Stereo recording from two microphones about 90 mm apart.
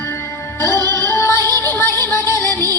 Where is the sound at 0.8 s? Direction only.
25° left (ahead or behind).